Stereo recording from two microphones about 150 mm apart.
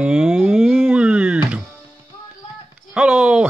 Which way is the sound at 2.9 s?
5° right (ahead or behind).